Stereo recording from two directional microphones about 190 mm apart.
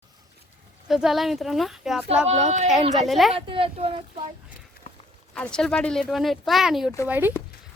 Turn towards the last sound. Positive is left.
turn(degrees=-10)  # may be behind; listen again after turning